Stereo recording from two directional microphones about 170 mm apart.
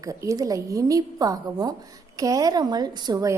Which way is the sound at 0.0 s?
20° right (ahead or behind).